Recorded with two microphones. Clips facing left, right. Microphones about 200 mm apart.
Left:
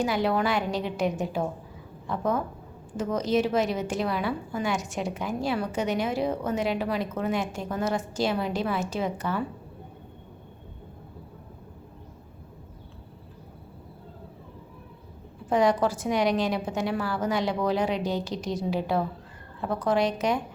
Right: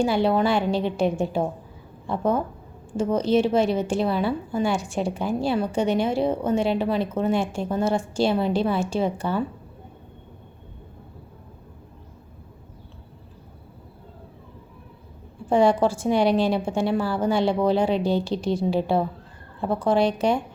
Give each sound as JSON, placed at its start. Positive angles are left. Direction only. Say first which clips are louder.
{"t": 0.0, "sound": "a woman's voice", "louder": "right 5 dB", "side_deg": -30}
{"t": 15.4, "sound": "a woman's voice", "louder": "right 4 dB", "side_deg": -30}